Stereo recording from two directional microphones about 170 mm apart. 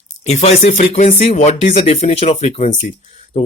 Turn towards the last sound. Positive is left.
turn(degrees=45)  # may be behind; listen again after turning